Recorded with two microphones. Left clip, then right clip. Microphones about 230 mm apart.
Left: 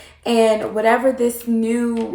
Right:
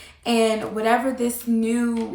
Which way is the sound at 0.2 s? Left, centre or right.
Centre.